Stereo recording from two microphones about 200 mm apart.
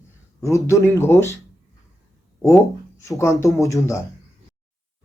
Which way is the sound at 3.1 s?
15° left (ahead or behind).